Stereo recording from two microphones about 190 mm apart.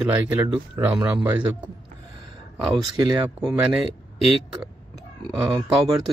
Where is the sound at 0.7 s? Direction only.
10° right (ahead or behind).